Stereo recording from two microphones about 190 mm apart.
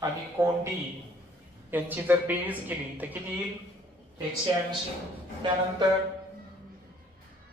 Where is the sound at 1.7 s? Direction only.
10° right (ahead or behind).